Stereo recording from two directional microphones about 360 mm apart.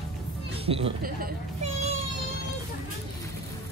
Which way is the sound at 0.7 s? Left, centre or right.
Centre.